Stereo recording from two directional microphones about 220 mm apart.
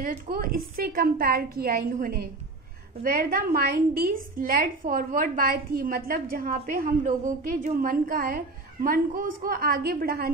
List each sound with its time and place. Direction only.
0.0 s a woman's voice: 40° right (ahead or behind)